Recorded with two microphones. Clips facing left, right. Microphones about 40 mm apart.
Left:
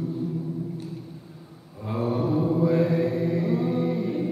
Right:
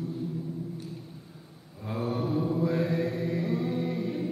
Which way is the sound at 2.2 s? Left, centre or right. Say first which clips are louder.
Left 5 dB; left.